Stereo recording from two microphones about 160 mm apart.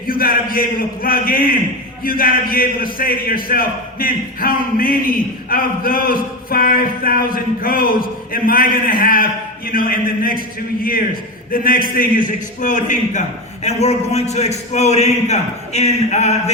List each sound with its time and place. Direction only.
0.1 s a man's voice: 65° left (ahead or behind); by 16.4 s 45° left (ahead or behind)